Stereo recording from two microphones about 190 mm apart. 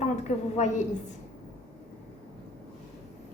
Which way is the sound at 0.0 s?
35° left (ahead or behind).